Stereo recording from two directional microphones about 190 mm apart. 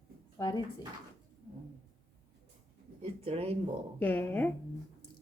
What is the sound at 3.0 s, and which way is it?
Speech, 30° right (ahead or behind).